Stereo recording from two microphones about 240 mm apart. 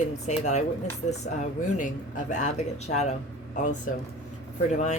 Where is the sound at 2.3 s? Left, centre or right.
Left.